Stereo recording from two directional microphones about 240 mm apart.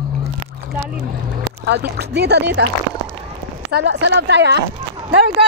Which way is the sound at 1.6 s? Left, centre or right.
Right.